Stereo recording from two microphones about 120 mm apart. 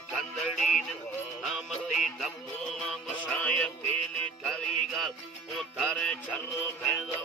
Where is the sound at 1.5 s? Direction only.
Centre (ahead or behind).